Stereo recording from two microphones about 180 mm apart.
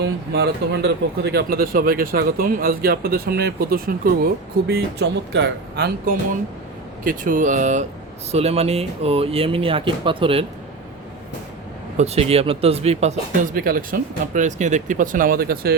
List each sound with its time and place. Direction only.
0.0 s speech: 65° right (ahead or behind)
4.7 s speech: 70° right (ahead or behind)
7.0 s speech: 50° right (ahead or behind); by 10.4 s 30° right (ahead or behind)
11.9 s speech: 35° right (ahead or behind); by 15.7 s 55° right (ahead or behind)